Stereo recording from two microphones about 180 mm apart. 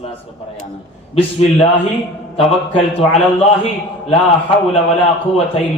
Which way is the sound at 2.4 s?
35° left (ahead or behind).